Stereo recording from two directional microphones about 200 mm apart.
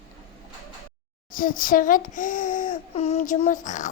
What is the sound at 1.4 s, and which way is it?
A child's voice, 45° left (ahead or behind).